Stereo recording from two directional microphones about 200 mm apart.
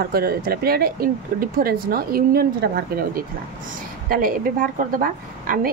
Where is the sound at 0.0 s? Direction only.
50° right (ahead or behind).